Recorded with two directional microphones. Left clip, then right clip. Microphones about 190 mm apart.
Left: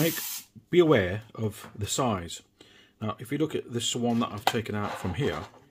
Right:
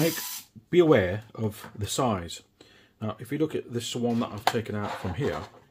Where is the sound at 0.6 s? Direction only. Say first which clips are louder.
Right 1 dB; 5° left (ahead or behind).